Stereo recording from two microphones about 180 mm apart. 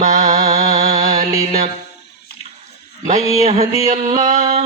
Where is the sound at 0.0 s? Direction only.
40° right (ahead or behind).